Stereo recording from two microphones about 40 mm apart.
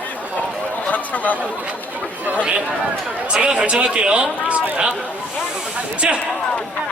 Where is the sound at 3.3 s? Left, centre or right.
Right.